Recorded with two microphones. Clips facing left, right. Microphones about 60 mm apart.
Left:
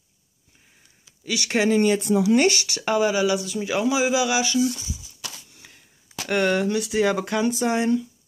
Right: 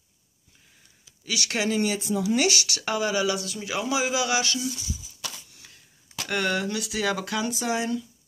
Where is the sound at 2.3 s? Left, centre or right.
Left; by 4.6 s centre.